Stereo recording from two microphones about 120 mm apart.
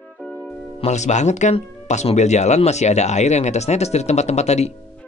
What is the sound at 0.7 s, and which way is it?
Speech, 70° left (ahead or behind).